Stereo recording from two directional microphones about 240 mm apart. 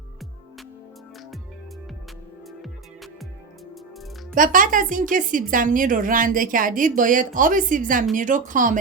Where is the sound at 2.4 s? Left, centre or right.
Centre.